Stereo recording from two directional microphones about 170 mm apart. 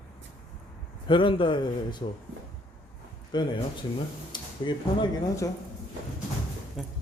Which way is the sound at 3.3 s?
25° left (ahead or behind).